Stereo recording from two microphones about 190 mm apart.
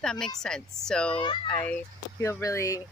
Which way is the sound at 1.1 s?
25° left (ahead or behind).